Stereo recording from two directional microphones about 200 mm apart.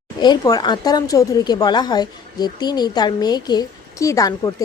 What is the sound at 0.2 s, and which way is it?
Speech, 20° left (ahead or behind).